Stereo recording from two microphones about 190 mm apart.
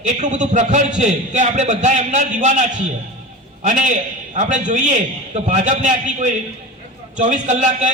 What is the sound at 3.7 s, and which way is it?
A man's voice, 40° right (ahead or behind).